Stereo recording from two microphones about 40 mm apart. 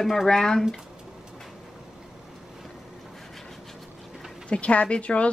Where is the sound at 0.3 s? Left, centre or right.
Centre.